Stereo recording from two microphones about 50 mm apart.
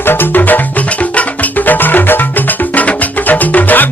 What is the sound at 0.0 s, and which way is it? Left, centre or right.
Music, left.